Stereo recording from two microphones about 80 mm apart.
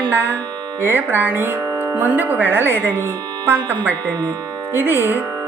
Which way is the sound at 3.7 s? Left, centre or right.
Left.